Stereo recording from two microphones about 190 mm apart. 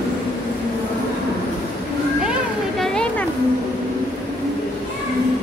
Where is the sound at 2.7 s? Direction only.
5° left (ahead or behind).